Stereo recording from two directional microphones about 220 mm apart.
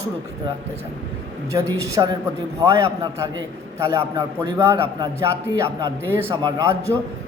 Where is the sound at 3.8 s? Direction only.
10° right (ahead or behind).